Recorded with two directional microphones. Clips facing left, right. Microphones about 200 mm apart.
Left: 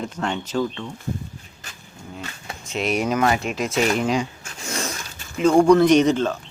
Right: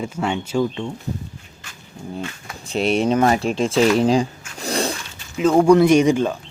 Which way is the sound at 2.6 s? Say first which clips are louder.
Right 4 dB; 30° right (ahead or behind).